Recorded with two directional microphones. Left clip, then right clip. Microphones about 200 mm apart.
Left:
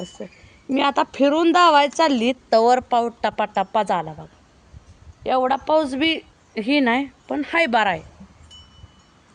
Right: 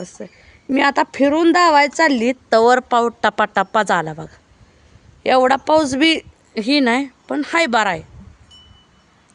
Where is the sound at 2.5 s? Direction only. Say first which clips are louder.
Right 3 dB; 35° right (ahead or behind).